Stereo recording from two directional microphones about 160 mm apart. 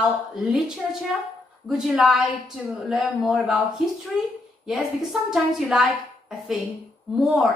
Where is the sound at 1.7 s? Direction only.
Centre (ahead or behind).